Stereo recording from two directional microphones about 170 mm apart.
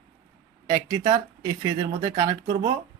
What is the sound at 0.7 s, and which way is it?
Speech, 20° right (ahead or behind).